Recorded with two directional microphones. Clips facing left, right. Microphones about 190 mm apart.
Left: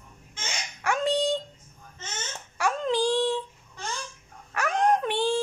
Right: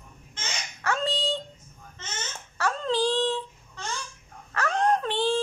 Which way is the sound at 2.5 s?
15° left (ahead or behind).